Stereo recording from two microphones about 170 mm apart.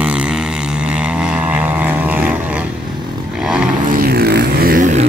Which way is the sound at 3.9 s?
60° right (ahead or behind).